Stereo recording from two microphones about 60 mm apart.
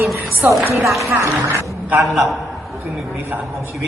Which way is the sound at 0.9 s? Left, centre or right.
Right.